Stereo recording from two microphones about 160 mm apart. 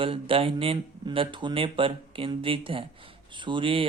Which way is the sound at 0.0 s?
35° right (ahead or behind).